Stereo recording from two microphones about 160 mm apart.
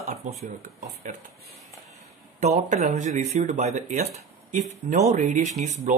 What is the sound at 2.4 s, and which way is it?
Speech, 45° right (ahead or behind).